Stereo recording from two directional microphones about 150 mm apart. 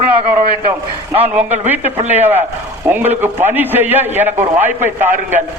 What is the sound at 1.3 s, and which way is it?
A man's voice, 10° right (ahead or behind).